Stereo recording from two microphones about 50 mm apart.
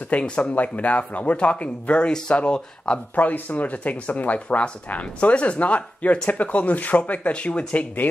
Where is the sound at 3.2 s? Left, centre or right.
Left.